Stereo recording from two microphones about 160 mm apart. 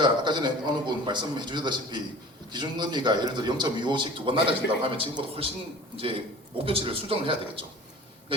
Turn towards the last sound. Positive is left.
turn(degrees=-35)  # may be behind; listen again after turning